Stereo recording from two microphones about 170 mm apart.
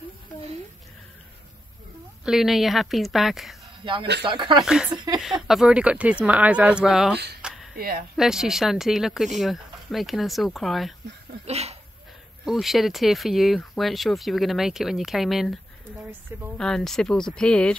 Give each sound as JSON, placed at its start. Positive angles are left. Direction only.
{"t": 2.2, "sound": "speech", "side_deg": 0}
{"t": 3.8, "sound": "speech", "side_deg": -30}
{"t": 4.6, "sound": "speech", "side_deg": -5}
{"t": 4.9, "sound": "speech", "side_deg": -25}
{"t": 5.5, "sound": "speech", "side_deg": -5}
{"t": 7.4, "sound": "a sound", "side_deg": 0}
{"t": 7.7, "sound": "speech", "side_deg": -60}
{"t": 8.2, "sound": "speech", "side_deg": -5}
{"t": 11.4, "sound": "speech", "side_deg": -40}
{"t": 12.4, "sound": "speech", "side_deg": 0}